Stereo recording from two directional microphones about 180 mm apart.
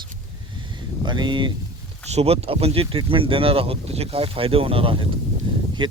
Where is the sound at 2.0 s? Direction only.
35° right (ahead or behind).